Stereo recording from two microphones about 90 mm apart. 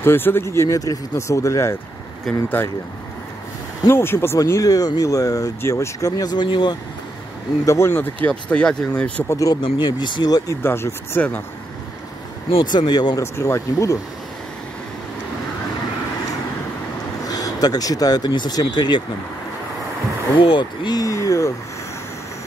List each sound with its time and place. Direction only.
0.0 s speech: 25° left (ahead or behind)
2.3 s speech: 5° left (ahead or behind)
3.9 s speech: 25° left (ahead or behind)
4.4 s speech: 40° left (ahead or behind); by 6.8 s 60° left (ahead or behind)
7.6 s speech: 30° left (ahead or behind)
7.9 s speech: 20° left (ahead or behind)
9.3 s speech: 40° left (ahead or behind)
9.6 s speech: 55° left (ahead or behind)
10.6 s speech: 25° left (ahead or behind)
12.7 s speech: 50° left (ahead or behind)
13.2 s speech: 30° left (ahead or behind)
17.3 s speech: 45° left (ahead or behind)
20.3 s speech: 70° left (ahead or behind)
20.9 s speech: 40° left (ahead or behind)